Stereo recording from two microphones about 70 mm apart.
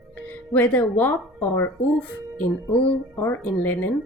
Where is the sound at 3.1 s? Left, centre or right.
Left.